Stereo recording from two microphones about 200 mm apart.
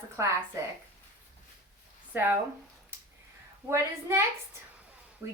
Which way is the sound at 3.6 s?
15° right (ahead or behind).